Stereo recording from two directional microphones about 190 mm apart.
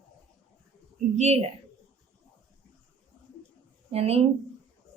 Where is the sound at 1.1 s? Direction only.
35° right (ahead or behind).